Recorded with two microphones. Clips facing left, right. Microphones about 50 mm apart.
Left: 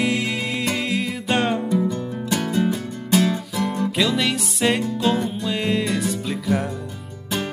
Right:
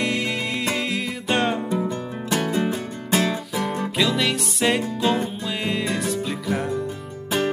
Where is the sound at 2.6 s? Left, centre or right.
Right.